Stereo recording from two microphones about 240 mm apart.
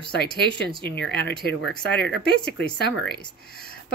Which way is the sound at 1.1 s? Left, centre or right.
Left.